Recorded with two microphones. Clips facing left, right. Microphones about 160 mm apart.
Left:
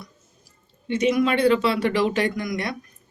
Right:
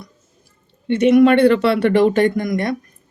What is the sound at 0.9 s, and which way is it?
A man's voice, 60° right (ahead or behind).